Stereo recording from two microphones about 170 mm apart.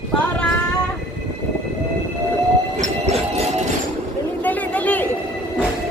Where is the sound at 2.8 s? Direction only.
40° right (ahead or behind).